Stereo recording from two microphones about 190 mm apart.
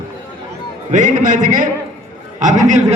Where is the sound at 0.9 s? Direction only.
40° right (ahead or behind).